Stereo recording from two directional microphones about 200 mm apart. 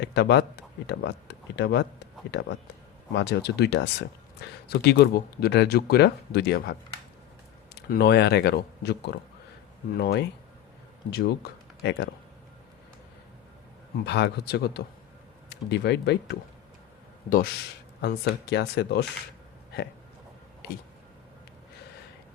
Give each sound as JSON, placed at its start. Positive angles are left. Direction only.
{"t": 0.0, "sound": "speech", "side_deg": 60}
{"t": 7.8, "sound": "speech", "side_deg": 55}
{"t": 14.0, "sound": "speech", "side_deg": 55}
{"t": 17.2, "sound": "speech", "side_deg": 45}